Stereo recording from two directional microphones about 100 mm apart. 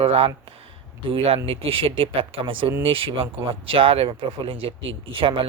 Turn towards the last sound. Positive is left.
turn(degrees=-60)  # may be behind; listen again after turning